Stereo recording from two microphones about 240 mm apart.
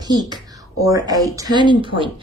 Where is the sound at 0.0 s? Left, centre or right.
Centre.